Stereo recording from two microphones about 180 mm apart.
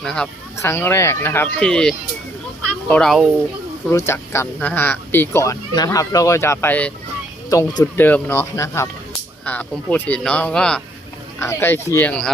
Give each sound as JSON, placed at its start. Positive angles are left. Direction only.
{"t": 0.0, "sound": "a child's voice", "side_deg": 5}
{"t": 3.9, "sound": "speech", "side_deg": 15}
{"t": 7.5, "sound": "speech", "side_deg": 20}